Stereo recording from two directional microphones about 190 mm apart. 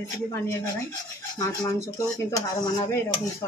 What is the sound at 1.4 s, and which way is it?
Speech, 15° left (ahead or behind).